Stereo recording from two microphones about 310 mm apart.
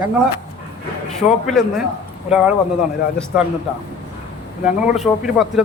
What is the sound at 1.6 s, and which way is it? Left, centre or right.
A man's voice, centre.